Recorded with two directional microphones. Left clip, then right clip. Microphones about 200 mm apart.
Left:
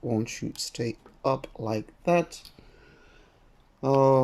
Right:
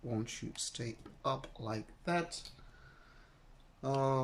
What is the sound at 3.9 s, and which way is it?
Speech, 40° left (ahead or behind).